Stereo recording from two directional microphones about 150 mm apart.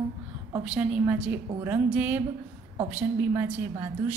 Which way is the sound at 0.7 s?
10° right (ahead or behind).